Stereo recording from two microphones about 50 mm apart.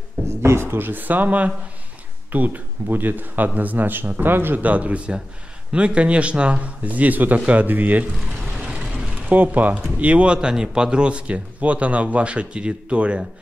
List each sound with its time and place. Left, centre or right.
0.3 s speech: right
9.3 s speech: right